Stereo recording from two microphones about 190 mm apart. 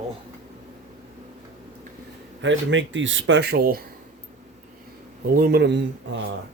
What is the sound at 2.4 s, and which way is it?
Speech, 75° right (ahead or behind).